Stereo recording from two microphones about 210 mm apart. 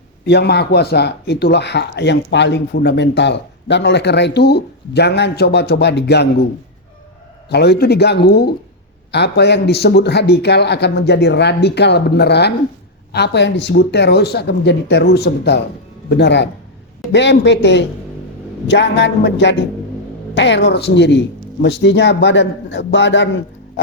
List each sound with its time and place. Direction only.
0.3 s speech: 50° left (ahead or behind)
7.5 s a man's voice: 50° left (ahead or behind)